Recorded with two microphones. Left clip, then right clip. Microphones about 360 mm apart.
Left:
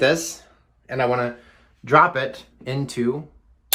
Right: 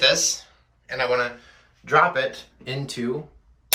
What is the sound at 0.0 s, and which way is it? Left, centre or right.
Speech, centre.